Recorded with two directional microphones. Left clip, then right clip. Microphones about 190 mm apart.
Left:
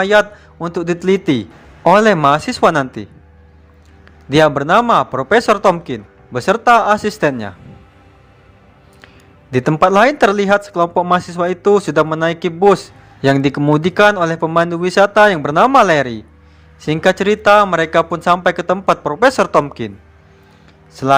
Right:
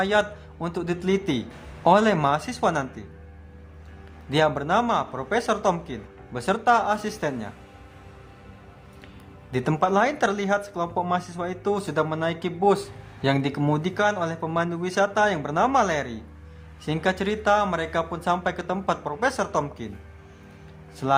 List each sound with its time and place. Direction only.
0.0 s speech: 30° left (ahead or behind)
4.3 s speech: 35° left (ahead or behind)
9.5 s speech: 35° left (ahead or behind)
20.9 s speech: 35° left (ahead or behind)